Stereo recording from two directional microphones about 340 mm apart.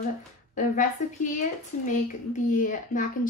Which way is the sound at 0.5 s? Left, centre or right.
Left.